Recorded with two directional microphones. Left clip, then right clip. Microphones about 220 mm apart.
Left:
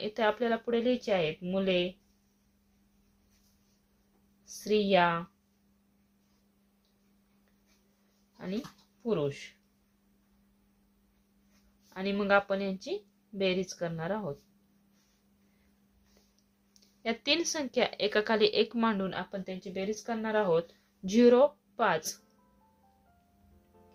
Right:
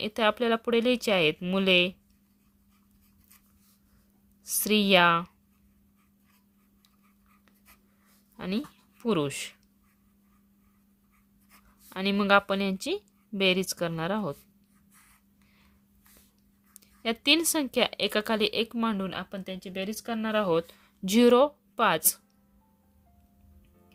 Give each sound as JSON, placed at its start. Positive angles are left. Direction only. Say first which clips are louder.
{"t": 0.0, "sound": "speech", "louder": "right 3 dB", "side_deg": -45}
{"t": 4.4, "sound": "speech", "louder": "right 3 dB", "side_deg": -55}
{"t": 9.0, "sound": "speech", "louder": "right 3 dB", "side_deg": -55}
{"t": 11.9, "sound": "speech", "louder": "right 4 dB", "side_deg": -50}
{"t": 16.8, "sound": "speech", "louder": "right 5 dB", "side_deg": -40}